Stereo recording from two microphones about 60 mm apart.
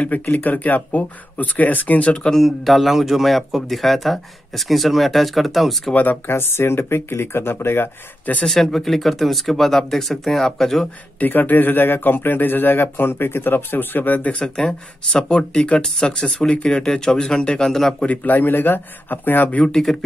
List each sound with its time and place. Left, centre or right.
0.3 s speech: left
2.3 s speech: centre
5.9 s a man's voice: left
8.5 s speech: centre
11.1 s a man's voice: left
15.1 s speech: centre
18.0 s a man's voice: left
19.6 s speech: centre